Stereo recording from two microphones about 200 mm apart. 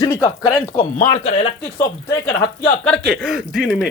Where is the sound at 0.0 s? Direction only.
15° left (ahead or behind).